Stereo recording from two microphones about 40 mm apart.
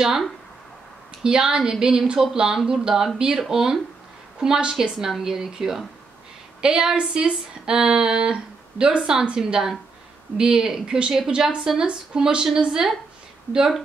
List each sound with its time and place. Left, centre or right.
1.2 s a woman's voice: centre